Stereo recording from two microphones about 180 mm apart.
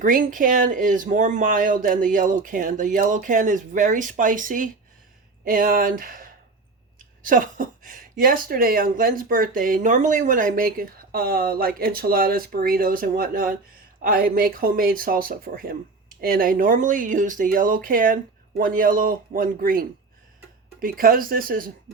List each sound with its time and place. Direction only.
0.0 s speech: 50° right (ahead or behind)
21.0 s speech: 50° right (ahead or behind)